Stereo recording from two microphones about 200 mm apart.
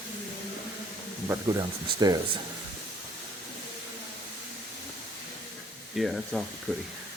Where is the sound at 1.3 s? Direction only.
20° right (ahead or behind).